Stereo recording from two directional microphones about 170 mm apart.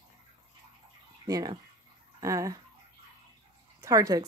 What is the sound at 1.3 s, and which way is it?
Speech, 20° right (ahead or behind).